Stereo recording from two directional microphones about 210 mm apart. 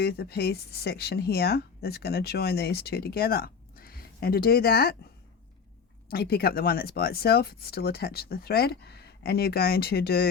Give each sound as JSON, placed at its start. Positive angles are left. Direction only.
{"t": 0.0, "sound": "speech", "side_deg": 50}
{"t": 6.1, "sound": "speech", "side_deg": 45}